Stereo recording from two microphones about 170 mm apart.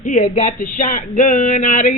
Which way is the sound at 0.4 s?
50° left (ahead or behind).